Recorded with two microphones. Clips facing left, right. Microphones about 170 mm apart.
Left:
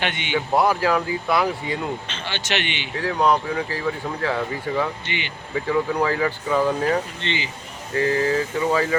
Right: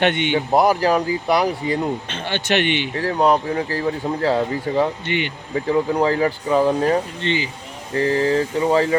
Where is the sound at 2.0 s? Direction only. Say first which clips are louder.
Right 6 dB; 55° right (ahead or behind).